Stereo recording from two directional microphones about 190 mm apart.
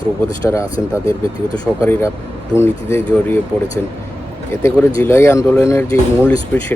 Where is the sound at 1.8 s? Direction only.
15° left (ahead or behind).